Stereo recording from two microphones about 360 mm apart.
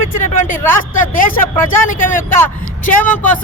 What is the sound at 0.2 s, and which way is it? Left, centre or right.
Speech, left.